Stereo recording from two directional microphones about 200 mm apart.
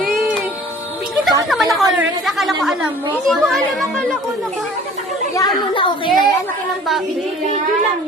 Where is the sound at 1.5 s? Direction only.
Centre (ahead or behind).